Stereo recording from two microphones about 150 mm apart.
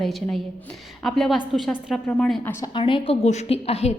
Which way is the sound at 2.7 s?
35° left (ahead or behind).